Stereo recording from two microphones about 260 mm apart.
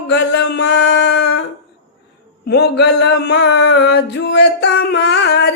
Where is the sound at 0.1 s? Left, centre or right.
Left.